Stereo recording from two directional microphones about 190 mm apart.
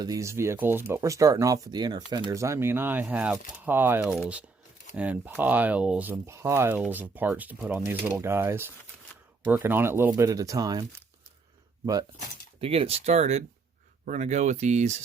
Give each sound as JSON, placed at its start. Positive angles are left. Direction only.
{"t": 0.0, "sound": "speech", "side_deg": -15}
{"t": 12.5, "sound": "speech", "side_deg": -30}